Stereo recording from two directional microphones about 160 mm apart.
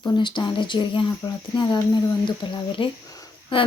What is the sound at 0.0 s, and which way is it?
Speech, 30° left (ahead or behind).